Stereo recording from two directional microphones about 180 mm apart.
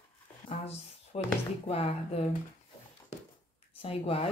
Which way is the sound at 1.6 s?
35° left (ahead or behind).